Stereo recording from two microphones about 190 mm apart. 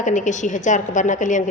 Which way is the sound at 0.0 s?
40° left (ahead or behind).